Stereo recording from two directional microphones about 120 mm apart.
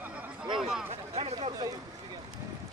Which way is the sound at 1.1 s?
55° right (ahead or behind).